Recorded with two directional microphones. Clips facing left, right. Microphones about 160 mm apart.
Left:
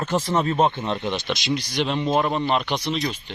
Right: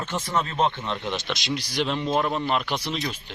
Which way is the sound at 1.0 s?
Centre (ahead or behind).